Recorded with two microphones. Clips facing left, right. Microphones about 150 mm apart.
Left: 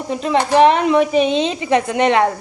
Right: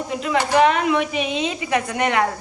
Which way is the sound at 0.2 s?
30° left (ahead or behind).